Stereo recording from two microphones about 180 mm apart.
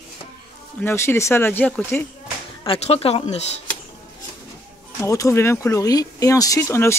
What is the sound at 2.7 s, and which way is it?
Speech, 35° left (ahead or behind).